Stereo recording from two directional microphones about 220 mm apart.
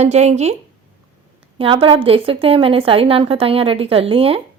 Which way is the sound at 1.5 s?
25° right (ahead or behind).